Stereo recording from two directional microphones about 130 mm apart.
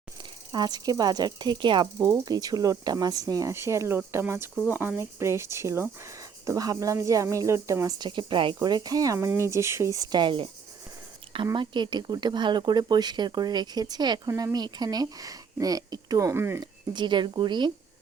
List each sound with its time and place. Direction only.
0.2 s speech: 35° right (ahead or behind)
11.5 s speech: 35° right (ahead or behind); by 16.6 s 20° right (ahead or behind)
16.9 s speech: 35° right (ahead or behind)